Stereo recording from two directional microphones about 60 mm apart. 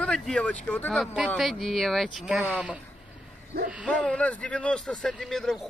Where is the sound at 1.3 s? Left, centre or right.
Centre.